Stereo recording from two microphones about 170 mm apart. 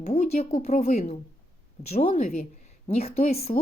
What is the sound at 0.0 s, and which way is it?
Speech, 40° left (ahead or behind).